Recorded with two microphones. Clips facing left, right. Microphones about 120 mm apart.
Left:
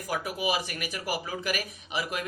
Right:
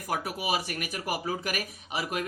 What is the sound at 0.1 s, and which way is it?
Speech, 45° right (ahead or behind).